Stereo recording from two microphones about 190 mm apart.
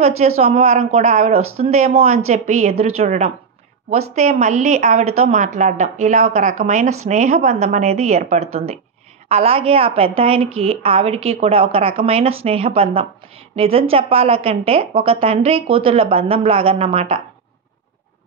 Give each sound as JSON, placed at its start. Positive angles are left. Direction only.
{"t": 0.4, "sound": "a woman's voice", "side_deg": -35}